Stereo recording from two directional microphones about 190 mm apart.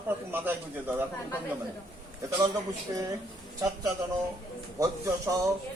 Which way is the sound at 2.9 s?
15° right (ahead or behind).